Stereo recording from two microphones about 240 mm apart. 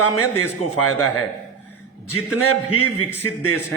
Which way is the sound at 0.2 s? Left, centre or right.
Left.